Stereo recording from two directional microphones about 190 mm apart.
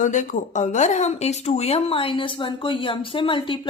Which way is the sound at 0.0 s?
40° left (ahead or behind).